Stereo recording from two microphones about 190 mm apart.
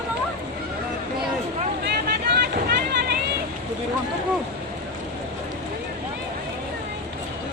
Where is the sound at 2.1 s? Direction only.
55° right (ahead or behind).